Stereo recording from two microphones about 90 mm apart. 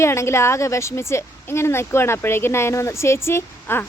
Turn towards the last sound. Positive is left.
turn(degrees=25)  # may be behind; listen again after turning